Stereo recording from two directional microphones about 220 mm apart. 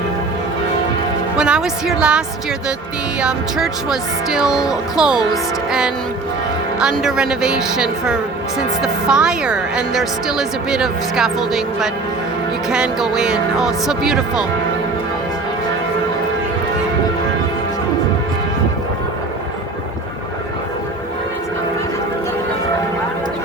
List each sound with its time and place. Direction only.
1.4 s a woman's voice: 5° right (ahead or behind)